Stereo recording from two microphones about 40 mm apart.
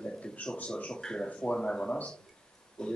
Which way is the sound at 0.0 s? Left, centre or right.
Left.